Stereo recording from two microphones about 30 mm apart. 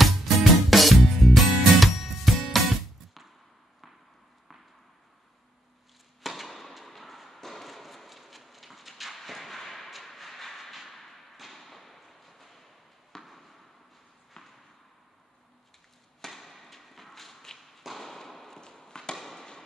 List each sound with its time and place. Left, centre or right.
0.0 s music: centre
6.2 s fireworks: centre
9.8 s train: centre
11.3 s thump: centre
13.2 s basketball bounce: centre
14.3 s a sound: centre
16.3 s chop: centre
17.6 s thump: centre
18.9 s chop: left
19.1 s fireworks: centre